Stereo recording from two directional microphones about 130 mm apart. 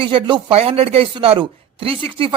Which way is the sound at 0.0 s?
40° right (ahead or behind).